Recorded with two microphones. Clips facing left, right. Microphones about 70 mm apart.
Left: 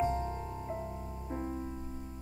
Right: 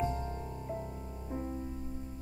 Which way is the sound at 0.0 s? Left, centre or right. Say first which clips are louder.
Left 3 dB; left.